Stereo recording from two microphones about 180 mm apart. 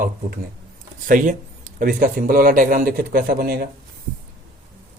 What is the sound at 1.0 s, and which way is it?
A man's voice, 45° right (ahead or behind).